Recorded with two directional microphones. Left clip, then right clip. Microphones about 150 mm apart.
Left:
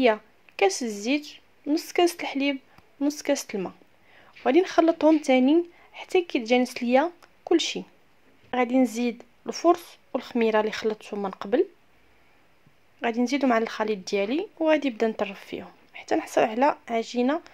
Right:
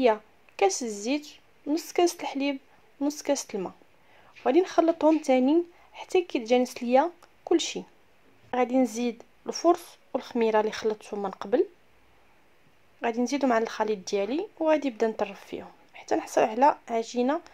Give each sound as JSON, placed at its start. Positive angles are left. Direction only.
{"t": 0.0, "sound": "a woman's voice", "side_deg": 15}
{"t": 13.0, "sound": "speech", "side_deg": 15}